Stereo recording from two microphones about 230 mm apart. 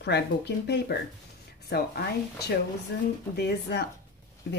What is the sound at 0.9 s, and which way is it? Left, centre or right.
A woman's voice, left.